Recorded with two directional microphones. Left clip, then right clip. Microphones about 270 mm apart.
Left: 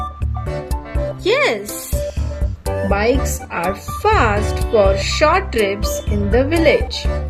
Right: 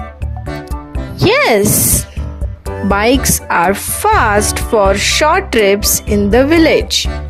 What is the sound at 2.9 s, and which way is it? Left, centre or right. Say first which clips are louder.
Speech: right 6 dB; right.